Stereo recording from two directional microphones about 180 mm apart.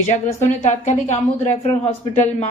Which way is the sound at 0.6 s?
40° left (ahead or behind).